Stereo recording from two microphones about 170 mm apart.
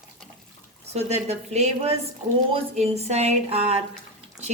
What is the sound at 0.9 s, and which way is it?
A woman's voice, 40° right (ahead or behind).